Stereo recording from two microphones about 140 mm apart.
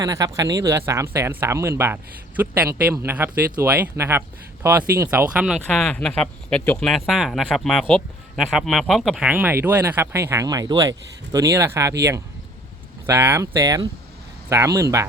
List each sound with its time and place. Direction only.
0.0 s speech: 25° right (ahead or behind); by 5.5 s 10° right (ahead or behind)
5.7 s speech: 5° left (ahead or behind)
9.3 s speech: 15° right (ahead or behind)